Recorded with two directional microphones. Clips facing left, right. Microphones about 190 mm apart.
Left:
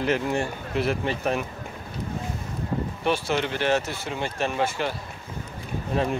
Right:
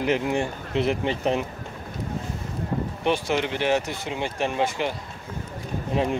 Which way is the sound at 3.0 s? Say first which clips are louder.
Right 1 dB; 15° right (ahead or behind).